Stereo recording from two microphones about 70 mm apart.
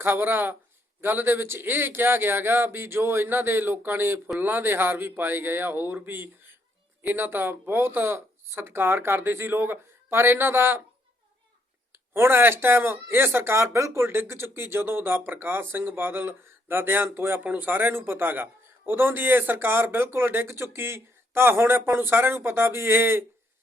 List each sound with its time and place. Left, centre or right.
0.0 s speech: right
11.9 s speech: right